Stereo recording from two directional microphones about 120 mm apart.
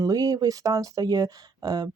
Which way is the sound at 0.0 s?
30° right (ahead or behind).